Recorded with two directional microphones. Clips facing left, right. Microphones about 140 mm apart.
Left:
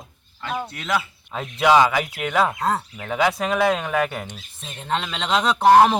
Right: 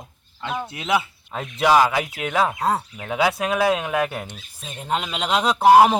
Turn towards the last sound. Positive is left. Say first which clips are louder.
# right 1 dB
turn(degrees=-10)  # may be behind; listen again after turning